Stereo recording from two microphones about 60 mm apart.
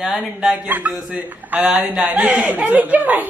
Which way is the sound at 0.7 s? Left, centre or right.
Right.